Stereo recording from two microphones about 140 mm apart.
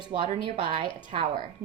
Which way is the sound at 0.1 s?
40° right (ahead or behind).